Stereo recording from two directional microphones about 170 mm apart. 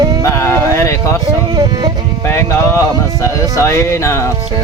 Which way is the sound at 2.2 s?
15° left (ahead or behind).